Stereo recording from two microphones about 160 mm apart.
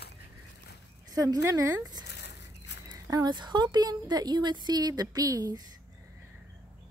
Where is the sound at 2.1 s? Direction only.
90° left.